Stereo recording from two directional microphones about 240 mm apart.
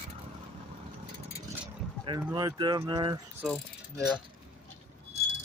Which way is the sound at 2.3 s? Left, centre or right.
Centre.